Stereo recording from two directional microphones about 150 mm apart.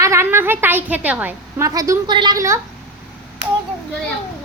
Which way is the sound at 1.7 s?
25° right (ahead or behind).